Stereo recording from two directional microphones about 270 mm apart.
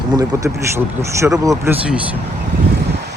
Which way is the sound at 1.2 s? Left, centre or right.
Centre.